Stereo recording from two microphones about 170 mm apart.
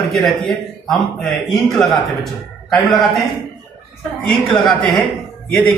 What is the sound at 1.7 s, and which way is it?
A man's voice, centre (ahead or behind).